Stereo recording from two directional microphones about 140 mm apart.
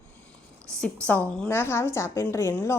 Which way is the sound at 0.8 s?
5° left (ahead or behind).